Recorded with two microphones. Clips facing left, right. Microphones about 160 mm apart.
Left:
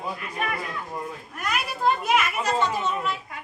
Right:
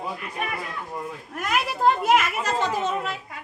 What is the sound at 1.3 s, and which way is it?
A child's voice, 90° right.